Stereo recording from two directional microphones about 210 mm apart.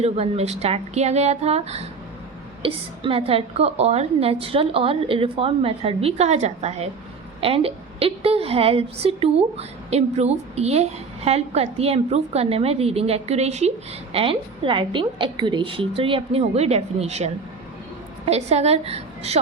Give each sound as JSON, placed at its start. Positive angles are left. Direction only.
{"t": 0.0, "sound": "a woman's voice", "side_deg": -30}